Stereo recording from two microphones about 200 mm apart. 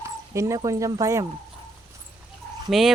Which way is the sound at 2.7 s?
Centre (ahead or behind).